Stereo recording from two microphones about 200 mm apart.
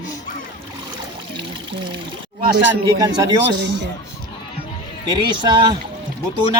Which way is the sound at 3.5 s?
60° right (ahead or behind).